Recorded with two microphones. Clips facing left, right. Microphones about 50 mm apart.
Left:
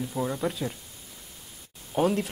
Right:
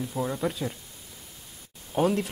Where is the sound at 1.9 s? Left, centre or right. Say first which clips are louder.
Even; centre.